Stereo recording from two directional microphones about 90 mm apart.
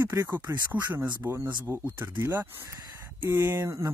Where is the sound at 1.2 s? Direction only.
35° right (ahead or behind).